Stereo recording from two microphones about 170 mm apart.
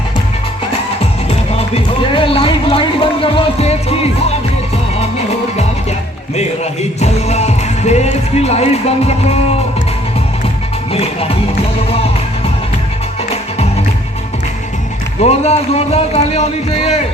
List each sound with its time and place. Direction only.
1.5 s music: 35° left (ahead or behind)
7.0 s speech: 40° left (ahead or behind)
10.9 s speech: 35° left (ahead or behind)
15.2 s speech: 40° left (ahead or behind)